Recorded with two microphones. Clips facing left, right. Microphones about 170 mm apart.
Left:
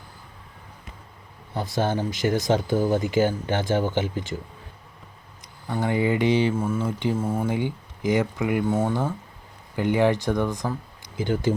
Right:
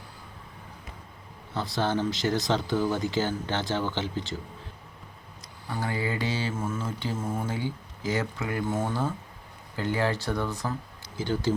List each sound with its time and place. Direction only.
1.6 s speech: 45° left (ahead or behind)
3.0 s speech: 15° left (ahead or behind)
3.6 s speech: 50° left (ahead or behind)
3.9 s speech: 15° left (ahead or behind)
5.6 s speech: 20° left (ahead or behind)